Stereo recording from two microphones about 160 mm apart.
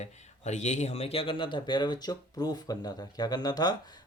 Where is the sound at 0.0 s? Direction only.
45° left (ahead or behind).